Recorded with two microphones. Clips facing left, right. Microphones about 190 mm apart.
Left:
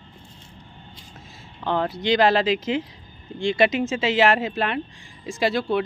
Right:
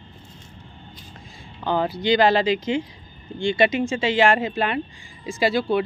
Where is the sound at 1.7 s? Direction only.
Centre (ahead or behind).